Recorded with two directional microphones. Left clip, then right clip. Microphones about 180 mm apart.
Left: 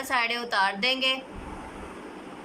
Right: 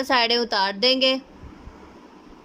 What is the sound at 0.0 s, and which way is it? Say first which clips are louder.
A woman's voice: right 6 dB; 55° right (ahead or behind).